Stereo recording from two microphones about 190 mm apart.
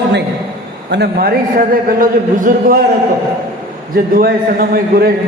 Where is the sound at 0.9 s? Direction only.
60° right (ahead or behind).